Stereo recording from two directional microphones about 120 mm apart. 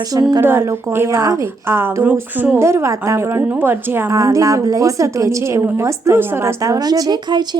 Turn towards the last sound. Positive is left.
turn(degrees=-35)  # may be behind; listen again after turning